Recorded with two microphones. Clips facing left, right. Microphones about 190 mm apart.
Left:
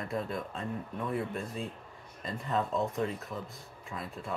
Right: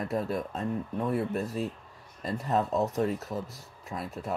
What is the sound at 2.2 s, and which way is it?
Speech, 40° right (ahead or behind).